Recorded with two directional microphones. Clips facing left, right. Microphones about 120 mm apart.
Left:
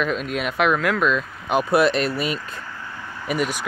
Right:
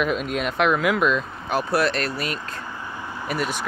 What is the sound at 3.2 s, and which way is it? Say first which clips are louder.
Speech: left 3 dB; 10° left (ahead or behind).